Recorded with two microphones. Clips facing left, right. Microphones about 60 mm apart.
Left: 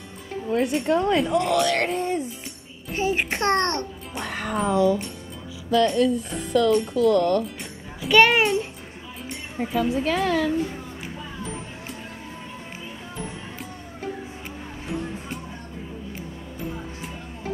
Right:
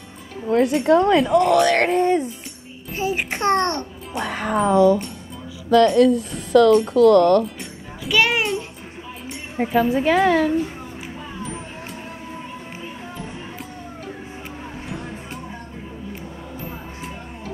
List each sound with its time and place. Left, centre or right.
0.5 s speech: right
3.4 s a child's voice: right
4.2 s speech: right
5.7 s speech: right
8.0 s a sound: centre
9.6 s a woman's voice: right